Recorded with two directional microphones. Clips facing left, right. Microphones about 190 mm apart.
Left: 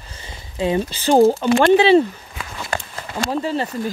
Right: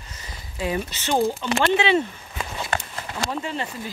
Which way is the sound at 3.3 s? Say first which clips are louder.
Left 9 dB; 35° left (ahead or behind).